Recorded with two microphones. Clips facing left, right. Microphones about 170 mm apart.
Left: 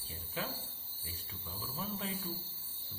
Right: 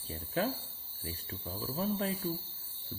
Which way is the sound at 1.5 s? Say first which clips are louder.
Right 8 dB; 35° right (ahead or behind).